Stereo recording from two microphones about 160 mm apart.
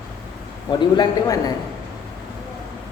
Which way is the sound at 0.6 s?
30° left (ahead or behind).